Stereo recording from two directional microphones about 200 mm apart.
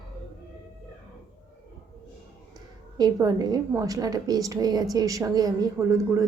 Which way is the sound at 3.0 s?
15° right (ahead or behind).